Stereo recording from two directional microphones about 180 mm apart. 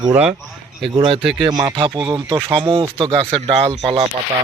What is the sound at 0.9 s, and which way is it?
Speech, 30° right (ahead or behind).